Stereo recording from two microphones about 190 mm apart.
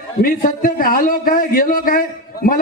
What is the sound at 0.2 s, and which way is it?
A man's voice, 50° left (ahead or behind).